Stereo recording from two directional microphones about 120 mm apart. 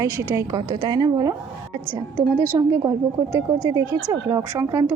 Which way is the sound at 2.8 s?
25° right (ahead or behind).